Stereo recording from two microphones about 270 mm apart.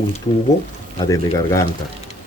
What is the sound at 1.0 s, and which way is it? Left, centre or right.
Speech, centre.